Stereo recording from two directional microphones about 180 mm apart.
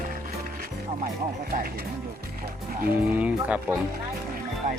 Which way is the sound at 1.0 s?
50° right (ahead or behind).